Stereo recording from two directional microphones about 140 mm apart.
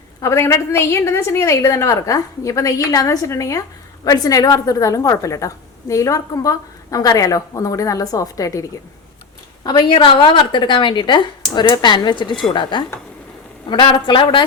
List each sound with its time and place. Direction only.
0.2 s a woman's voice: 20° left (ahead or behind)
9.6 s a woman's voice: 35° left (ahead or behind)